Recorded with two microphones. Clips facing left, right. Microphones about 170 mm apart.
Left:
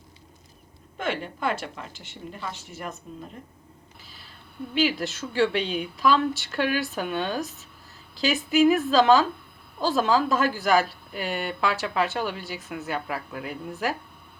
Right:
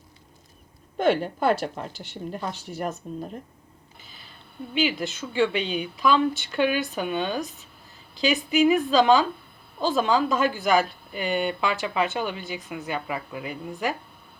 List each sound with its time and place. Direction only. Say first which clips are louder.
1.2 s speech: right 6 dB; 35° right (ahead or behind)
1.9 s speech: right 5 dB; centre (ahead or behind)
3.1 s speech: right 6 dB; 40° right (ahead or behind)
4.0 s a sound: right 2 dB; centre (ahead or behind)
4.7 s speech: left 1 dB; centre (ahead or behind)